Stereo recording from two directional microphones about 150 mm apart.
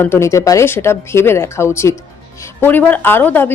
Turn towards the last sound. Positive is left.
turn(degrees=15)  # may be behind; listen again after turning